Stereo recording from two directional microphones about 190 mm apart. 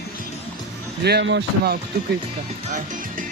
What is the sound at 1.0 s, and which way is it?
Speech, 60° right (ahead or behind).